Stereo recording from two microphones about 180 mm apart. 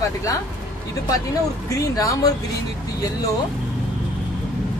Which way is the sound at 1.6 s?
20° left (ahead or behind).